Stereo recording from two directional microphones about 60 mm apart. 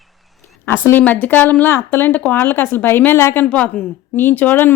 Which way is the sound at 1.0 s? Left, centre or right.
Left.